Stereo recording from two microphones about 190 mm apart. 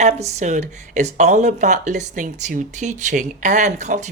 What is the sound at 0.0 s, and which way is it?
Speech, 35° right (ahead or behind).